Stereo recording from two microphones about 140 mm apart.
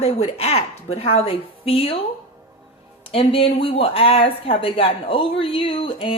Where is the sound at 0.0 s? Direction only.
45° left (ahead or behind).